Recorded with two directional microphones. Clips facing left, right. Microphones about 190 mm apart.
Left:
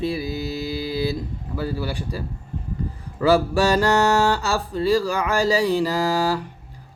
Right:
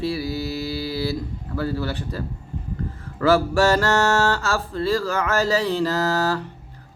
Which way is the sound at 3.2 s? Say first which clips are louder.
Even; 15° left (ahead or behind).